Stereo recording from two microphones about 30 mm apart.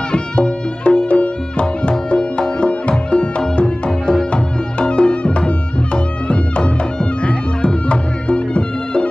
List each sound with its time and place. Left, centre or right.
0.1 s music: left